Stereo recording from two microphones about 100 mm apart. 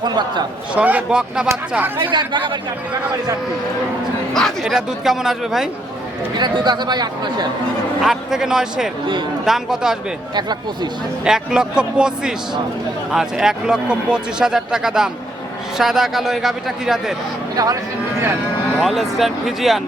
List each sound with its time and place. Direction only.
0.0 s a man's voice: 45° right (ahead or behind)
0.7 s a man's voice: 15° right (ahead or behind)
2.0 s a man's voice: 55° right (ahead or behind)
4.4 s speech: centre (ahead or behind)
6.3 s a man's voice: 45° right (ahead or behind)
8.0 s speech: 5° right (ahead or behind)
11.3 s a man's voice: 5° right (ahead or behind)
18.8 s speech: centre (ahead or behind)